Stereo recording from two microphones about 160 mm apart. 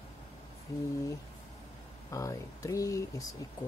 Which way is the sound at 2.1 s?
20° left (ahead or behind).